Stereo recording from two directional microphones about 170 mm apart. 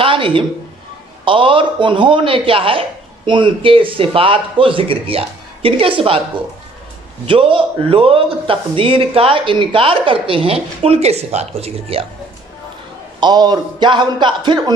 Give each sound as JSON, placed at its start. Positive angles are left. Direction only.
{"t": 0.0, "sound": "a sound", "side_deg": -30}
{"t": 1.2, "sound": "speech", "side_deg": -30}
{"t": 7.2, "sound": "speech", "side_deg": -30}
{"t": 13.2, "sound": "speech", "side_deg": -25}